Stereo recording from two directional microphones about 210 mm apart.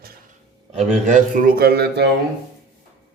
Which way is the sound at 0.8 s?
35° right (ahead or behind).